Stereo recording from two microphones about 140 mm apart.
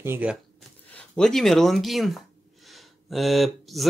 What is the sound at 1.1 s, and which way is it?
Speech, 5° left (ahead or behind).